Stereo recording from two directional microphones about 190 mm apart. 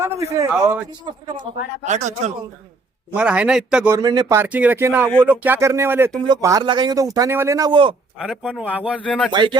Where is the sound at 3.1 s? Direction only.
5° right (ahead or behind).